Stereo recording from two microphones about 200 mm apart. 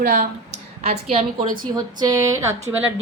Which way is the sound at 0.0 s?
40° right (ahead or behind).